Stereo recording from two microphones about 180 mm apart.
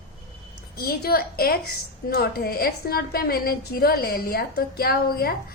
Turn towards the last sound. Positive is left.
turn(degrees=60)  # may be behind; listen again after turning